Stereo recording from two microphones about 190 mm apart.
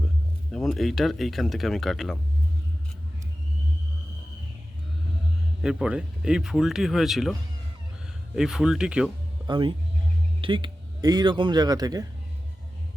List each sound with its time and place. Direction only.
0.5 s speech: centre (ahead or behind)
5.6 s speech: 5° right (ahead or behind)
8.4 s speech: centre (ahead or behind)
9.5 s speech: 25° right (ahead or behind)